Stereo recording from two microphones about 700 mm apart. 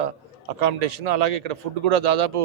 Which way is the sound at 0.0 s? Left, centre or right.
Right.